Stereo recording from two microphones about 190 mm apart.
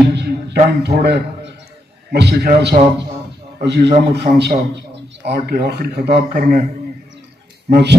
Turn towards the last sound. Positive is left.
turn(degrees=-60)  # may be behind; listen again after turning